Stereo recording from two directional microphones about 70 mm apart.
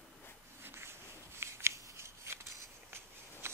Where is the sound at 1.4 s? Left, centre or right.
Right.